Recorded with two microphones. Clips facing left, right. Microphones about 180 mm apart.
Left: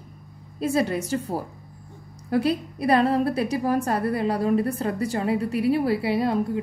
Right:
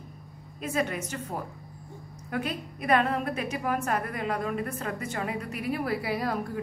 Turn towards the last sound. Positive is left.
turn(degrees=25)  # may be behind; listen again after turning